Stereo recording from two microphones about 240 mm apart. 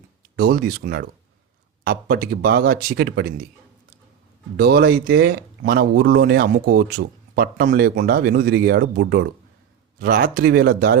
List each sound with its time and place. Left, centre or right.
0.3 s speech: right
4.5 s speech: right